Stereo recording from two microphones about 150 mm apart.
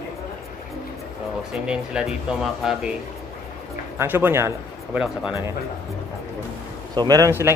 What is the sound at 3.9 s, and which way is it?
Speech, 15° right (ahead or behind).